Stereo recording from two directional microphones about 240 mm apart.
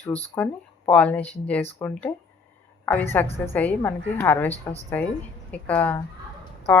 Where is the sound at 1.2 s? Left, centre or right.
Left.